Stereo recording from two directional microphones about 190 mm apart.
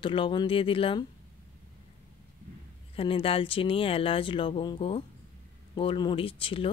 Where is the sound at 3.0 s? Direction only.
30° left (ahead or behind).